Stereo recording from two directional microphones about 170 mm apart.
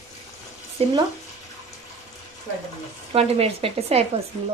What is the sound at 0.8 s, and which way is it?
Speech, 35° right (ahead or behind).